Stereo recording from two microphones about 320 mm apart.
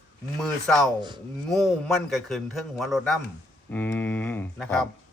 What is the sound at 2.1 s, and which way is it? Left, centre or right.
Speech, centre.